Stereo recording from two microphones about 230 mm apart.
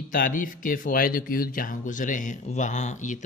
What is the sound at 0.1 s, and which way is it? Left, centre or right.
A man's voice, left.